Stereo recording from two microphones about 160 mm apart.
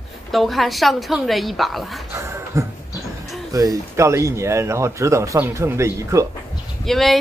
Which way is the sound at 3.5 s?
20° right (ahead or behind).